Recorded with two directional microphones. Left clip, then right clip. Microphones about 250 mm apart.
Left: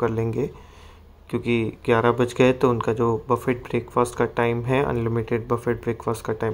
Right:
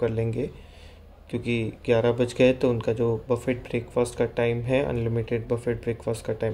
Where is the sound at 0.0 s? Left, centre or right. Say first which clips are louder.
Left 3 dB; centre.